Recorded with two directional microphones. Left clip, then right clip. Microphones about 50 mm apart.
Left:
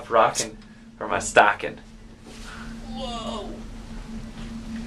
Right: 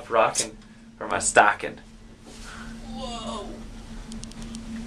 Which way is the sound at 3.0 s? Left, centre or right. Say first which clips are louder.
Left 2 dB; left.